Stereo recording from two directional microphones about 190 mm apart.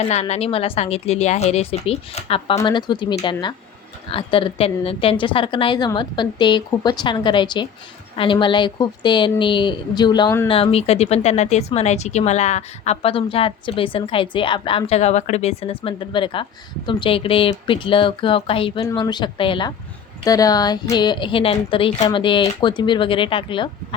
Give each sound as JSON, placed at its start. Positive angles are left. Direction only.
{"t": 0.0, "sound": "a woman's voice", "side_deg": 35}
{"t": 10.5, "sound": "speech", "side_deg": 30}